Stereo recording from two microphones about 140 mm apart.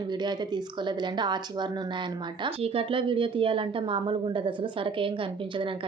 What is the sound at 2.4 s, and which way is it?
A woman's voice, 45° right (ahead or behind).